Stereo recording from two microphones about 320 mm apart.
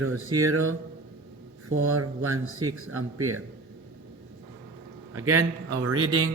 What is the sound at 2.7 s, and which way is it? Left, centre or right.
Speech, right.